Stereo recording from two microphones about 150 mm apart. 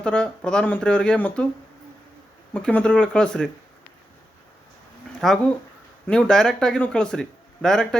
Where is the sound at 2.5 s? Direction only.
5° left (ahead or behind).